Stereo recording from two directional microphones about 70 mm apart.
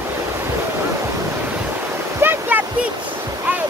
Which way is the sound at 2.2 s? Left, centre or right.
Right.